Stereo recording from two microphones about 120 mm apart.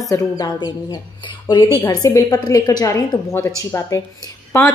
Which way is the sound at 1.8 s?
30° left (ahead or behind).